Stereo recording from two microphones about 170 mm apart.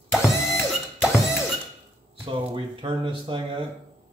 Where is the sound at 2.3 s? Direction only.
30° right (ahead or behind).